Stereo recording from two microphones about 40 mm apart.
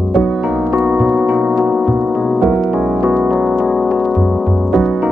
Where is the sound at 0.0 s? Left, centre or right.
Centre.